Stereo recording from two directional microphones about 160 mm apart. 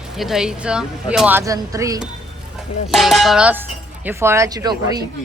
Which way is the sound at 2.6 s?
Centre (ahead or behind).